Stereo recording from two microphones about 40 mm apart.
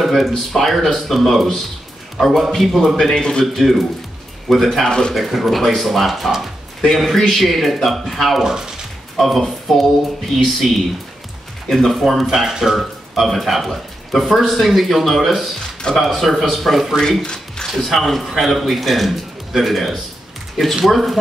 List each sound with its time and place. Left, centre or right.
0.0 s a sound: centre
0.5 s a man's voice: centre
3.2 s a man's voice: centre
3.5 s speech: centre
4.8 s speech: centre
5.1 s speech: centre
8.4 s speech: centre
9.1 s speech: centre
11.7 s speech: centre
12.3 s speech: centre
12.7 s speech: centre
17.2 s speech: centre
17.7 s speech: centre